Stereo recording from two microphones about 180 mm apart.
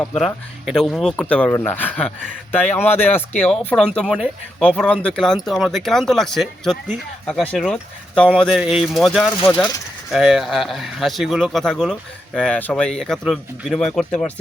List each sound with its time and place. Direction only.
0.0 s speech: 5° left (ahead or behind)
4.0 s speech: 5° right (ahead or behind)
4.6 s speech: 5° left (ahead or behind)
9.4 s speech: 25° left (ahead or behind)
10.1 s speech: centre (ahead or behind)